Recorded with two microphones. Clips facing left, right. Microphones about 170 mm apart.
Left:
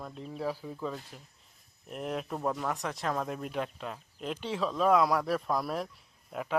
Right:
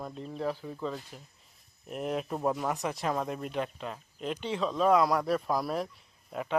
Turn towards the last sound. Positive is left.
turn(degrees=0)  # may be behind; listen again after turning